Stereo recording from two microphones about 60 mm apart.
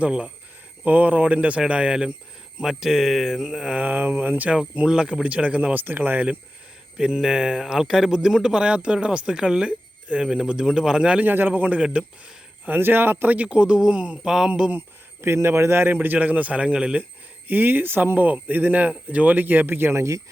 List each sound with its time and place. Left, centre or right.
0.0 s a man's voice: centre
0.9 s a man's voice: right; by 3.8 s centre
3.8 s speech: right
4.5 s speech: centre
6.9 s a man's voice: centre
11.3 s speech: right; by 14.7 s centre
14.7 s speech: right
16.0 s speech: right
17.5 s speech: right
20.0 s speech: right